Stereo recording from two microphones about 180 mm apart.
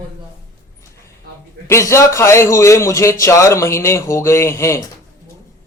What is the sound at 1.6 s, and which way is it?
A man's voice, 15° left (ahead or behind).